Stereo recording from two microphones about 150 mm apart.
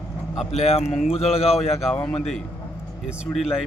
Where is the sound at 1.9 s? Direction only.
5° left (ahead or behind).